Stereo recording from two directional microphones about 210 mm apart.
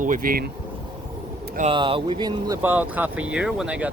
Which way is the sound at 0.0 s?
40° right (ahead or behind).